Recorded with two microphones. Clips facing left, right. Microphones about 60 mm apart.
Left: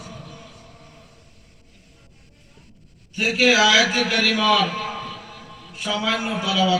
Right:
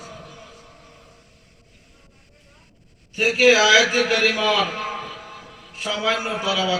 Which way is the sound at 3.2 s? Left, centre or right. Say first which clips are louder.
Right 2 dB; right.